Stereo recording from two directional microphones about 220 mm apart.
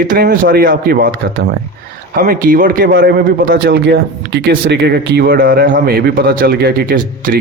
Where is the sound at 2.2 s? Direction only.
40° right (ahead or behind).